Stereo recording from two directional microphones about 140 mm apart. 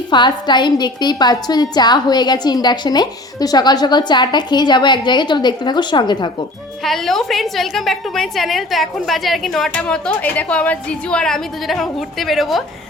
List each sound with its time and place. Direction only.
0.1 s a woman's voice: 35° left (ahead or behind)
6.8 s a woman's voice: centre (ahead or behind)